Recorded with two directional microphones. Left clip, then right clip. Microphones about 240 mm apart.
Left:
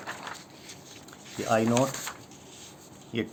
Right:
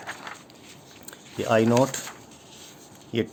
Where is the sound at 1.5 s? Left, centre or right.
Right.